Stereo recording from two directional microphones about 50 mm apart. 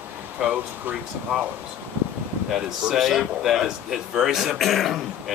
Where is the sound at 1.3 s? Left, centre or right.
Right.